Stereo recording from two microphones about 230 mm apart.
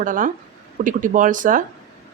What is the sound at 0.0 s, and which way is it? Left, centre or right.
Speech, right.